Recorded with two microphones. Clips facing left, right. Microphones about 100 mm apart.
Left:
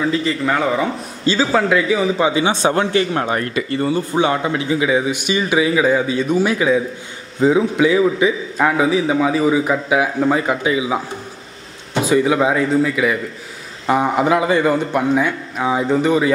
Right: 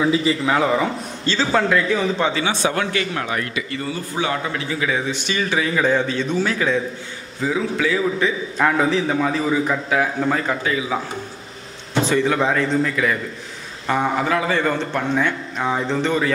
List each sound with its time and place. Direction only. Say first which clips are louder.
0.0 s a man's voice: even; 10° right (ahead or behind)
1.2 s a man's voice: left 3 dB; 10° left (ahead or behind)
2.4 s speech: left 4 dB; 30° left (ahead or behind)
3.9 s a man's voice: left 6 dB; 25° left (ahead or behind)